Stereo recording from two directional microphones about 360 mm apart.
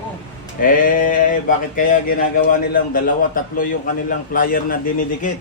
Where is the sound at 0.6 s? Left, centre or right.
Left.